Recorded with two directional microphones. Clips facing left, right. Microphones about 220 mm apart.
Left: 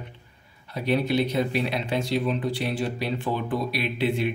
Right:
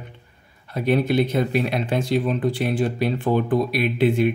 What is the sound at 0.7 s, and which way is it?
Speech, 50° right (ahead or behind).